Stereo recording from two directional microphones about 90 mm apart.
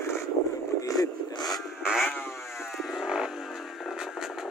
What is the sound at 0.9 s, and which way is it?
Speech, 45° left (ahead or behind).